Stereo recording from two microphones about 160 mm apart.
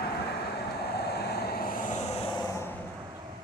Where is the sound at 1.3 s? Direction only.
70° left (ahead or behind); by 2.1 s 50° left (ahead or behind).